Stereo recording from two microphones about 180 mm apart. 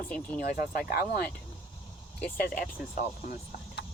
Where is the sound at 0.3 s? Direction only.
55° left (ahead or behind).